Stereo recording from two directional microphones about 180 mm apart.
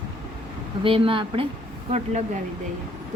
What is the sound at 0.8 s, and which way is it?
Speech, 30° right (ahead or behind).